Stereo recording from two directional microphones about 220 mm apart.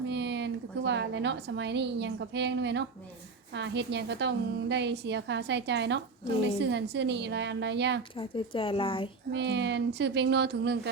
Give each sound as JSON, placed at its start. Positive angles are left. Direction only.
{"t": 0.1, "sound": "a woman's voice", "side_deg": -50}
{"t": 8.1, "sound": "speech", "side_deg": 25}
{"t": 9.3, "sound": "a woman's voice", "side_deg": -50}